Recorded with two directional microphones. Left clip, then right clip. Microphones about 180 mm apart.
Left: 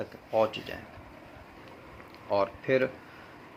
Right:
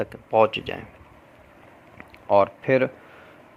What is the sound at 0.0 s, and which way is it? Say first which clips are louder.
Speech: right 8 dB; 60° right (ahead or behind).